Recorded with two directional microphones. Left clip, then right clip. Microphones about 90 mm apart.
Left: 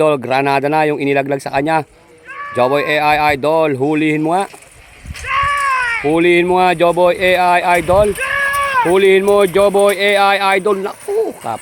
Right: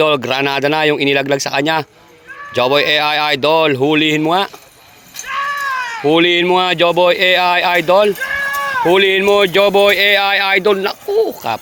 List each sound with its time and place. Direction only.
0.3 s speech: 30° left (ahead or behind)
5.2 s cat: 20° left (ahead or behind)
7.0 s speech: 20° left (ahead or behind)
11.1 s a sound: 20° right (ahead or behind)